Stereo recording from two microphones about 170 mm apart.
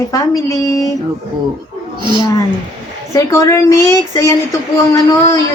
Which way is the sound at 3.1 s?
20° left (ahead or behind).